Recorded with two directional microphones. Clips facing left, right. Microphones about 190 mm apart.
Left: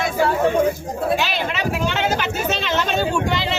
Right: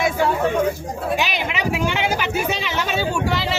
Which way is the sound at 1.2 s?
15° right (ahead or behind).